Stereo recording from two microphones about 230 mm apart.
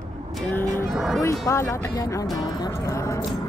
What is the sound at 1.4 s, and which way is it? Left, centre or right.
Speech, centre.